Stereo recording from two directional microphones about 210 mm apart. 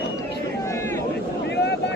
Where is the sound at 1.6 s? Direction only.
50° left (ahead or behind).